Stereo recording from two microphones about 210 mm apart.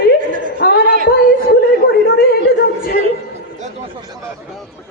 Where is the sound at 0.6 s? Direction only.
50° left (ahead or behind).